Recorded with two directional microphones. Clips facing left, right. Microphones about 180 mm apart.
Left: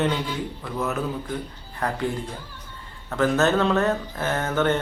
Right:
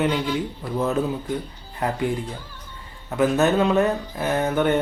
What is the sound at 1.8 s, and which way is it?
Speech, 20° right (ahead or behind).